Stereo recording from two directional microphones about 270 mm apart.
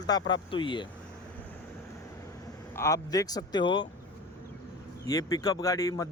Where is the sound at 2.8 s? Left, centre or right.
Centre.